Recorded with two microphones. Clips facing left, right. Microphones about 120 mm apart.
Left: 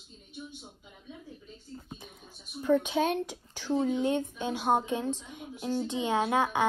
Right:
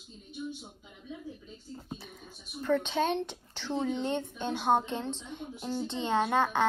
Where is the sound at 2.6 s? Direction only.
10° left (ahead or behind).